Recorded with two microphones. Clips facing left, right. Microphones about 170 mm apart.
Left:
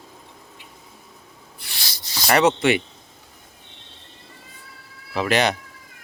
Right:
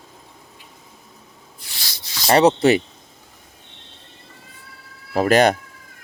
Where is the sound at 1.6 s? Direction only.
65° left (ahead or behind).